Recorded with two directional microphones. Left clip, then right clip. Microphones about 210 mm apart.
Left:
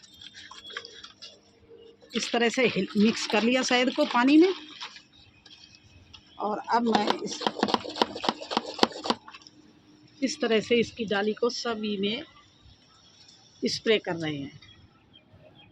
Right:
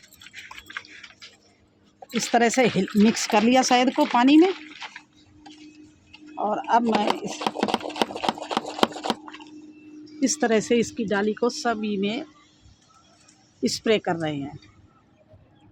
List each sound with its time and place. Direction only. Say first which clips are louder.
2.3 s speech: right 5 dB; 55° right (ahead or behind)
6.4 s speech: right 5 dB; 40° right (ahead or behind)
6.8 s chopping: right 2 dB; 20° right (ahead or behind)
7.3 s a sound: right 2 dB; 20° right (ahead or behind)
10.2 s speech: right 4 dB; 50° right (ahead or behind)
13.6 s speech: right 2 dB; 55° right (ahead or behind)